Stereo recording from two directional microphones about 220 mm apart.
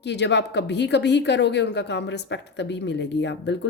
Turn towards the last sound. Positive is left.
turn(degrees=50)  # may be behind; listen again after turning